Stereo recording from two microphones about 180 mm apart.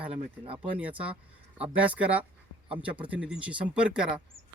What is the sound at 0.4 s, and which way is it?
Speech, 30° right (ahead or behind).